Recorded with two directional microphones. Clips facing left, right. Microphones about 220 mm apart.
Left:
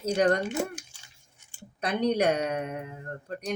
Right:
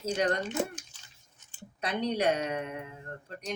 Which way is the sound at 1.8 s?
50° left (ahead or behind).